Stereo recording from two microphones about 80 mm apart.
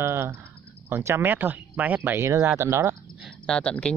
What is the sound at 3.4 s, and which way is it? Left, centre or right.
Speech, centre.